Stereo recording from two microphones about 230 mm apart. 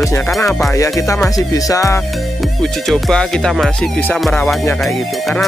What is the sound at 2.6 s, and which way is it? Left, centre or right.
Music, centre.